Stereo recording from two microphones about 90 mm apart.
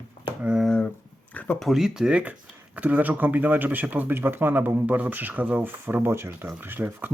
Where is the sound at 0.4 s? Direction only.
15° right (ahead or behind).